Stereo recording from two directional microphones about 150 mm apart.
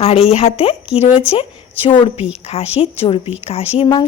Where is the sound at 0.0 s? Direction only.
40° left (ahead or behind).